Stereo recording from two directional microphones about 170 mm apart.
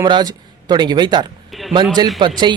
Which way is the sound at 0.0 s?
25° right (ahead or behind).